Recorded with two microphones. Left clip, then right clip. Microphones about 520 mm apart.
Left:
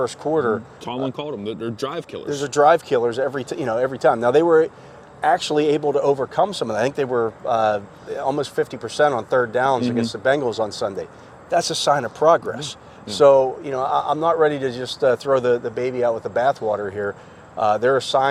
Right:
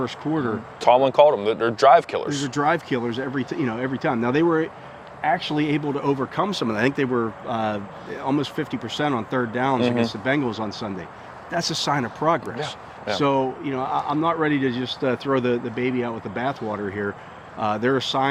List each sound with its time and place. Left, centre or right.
0.0 s a man's voice: left
0.8 s speech: right
2.5 s a man's voice: left
5.2 s a man's voice: left
10.2 s a man's voice: left